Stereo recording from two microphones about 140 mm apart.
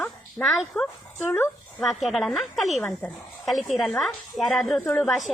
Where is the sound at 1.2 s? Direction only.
15° left (ahead or behind).